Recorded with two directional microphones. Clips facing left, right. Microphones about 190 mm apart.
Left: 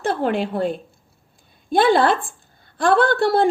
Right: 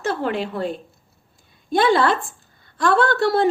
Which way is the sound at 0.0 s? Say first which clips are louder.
Left 2 dB; 55° left (ahead or behind).